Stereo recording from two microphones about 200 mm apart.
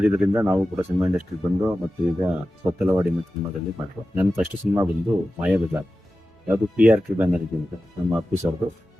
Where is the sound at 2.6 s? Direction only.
10° right (ahead or behind).